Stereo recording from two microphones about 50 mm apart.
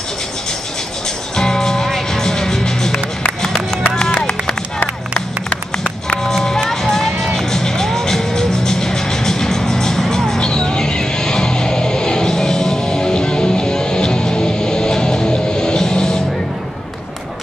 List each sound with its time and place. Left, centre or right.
1.3 s music: centre
4.7 s music: left
6.2 s music: centre